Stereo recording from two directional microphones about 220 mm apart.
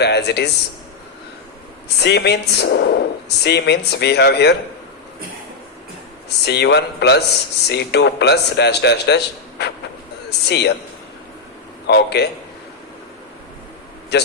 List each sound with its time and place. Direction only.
0.0 s speech: 50° left (ahead or behind)
2.0 s speech: 50° left (ahead or behind)
6.4 s speech: 50° left (ahead or behind)
11.9 s speech: 50° left (ahead or behind)